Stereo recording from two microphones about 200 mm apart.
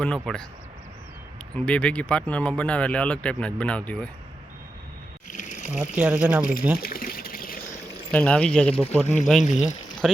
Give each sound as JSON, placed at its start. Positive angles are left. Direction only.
{"t": 0.0, "sound": "speech", "side_deg": 5}
{"t": 1.5, "sound": "speech", "side_deg": 5}
{"t": 5.4, "sound": "a sound", "side_deg": 35}
{"t": 5.7, "sound": "speech", "side_deg": -5}
{"t": 6.7, "sound": "a sound", "side_deg": 45}
{"t": 8.1, "sound": "speech", "side_deg": 5}
{"t": 9.4, "sound": "speech", "side_deg": 35}
{"t": 10.0, "sound": "speech", "side_deg": 0}